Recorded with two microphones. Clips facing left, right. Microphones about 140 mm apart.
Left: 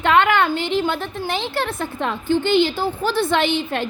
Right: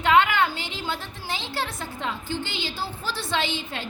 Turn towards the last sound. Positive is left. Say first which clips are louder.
# left 8 dB
turn(degrees=60)  # may be behind; listen again after turning